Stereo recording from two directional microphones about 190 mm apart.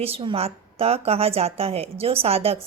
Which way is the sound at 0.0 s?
30° right (ahead or behind).